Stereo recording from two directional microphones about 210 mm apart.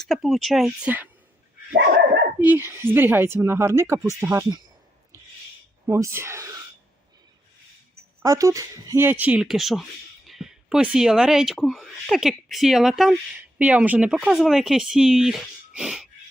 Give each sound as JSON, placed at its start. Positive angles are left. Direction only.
{"t": 0.0, "sound": "speech", "side_deg": 0}
{"t": 1.7, "sound": "dog", "side_deg": -55}
{"t": 2.4, "sound": "speech", "side_deg": -10}
{"t": 5.8, "sound": "speech", "side_deg": -15}
{"t": 8.2, "sound": "speech", "side_deg": -15}